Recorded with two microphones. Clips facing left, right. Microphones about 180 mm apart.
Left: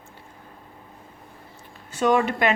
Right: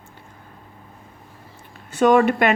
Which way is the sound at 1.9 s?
55° right (ahead or behind).